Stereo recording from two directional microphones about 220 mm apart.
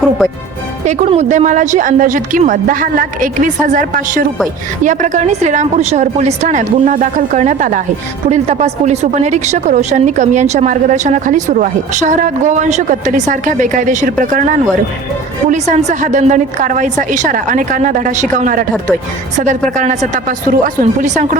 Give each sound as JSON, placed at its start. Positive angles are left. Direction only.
{"t": 0.9, "sound": "a woman's voice", "side_deg": -30}